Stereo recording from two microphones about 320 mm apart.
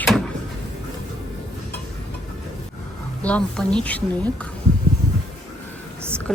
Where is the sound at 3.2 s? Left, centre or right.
Centre.